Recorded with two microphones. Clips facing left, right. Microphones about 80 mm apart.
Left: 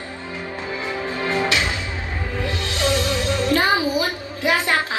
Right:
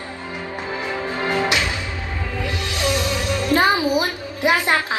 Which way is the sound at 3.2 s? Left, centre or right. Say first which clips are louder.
Left 1 dB; left.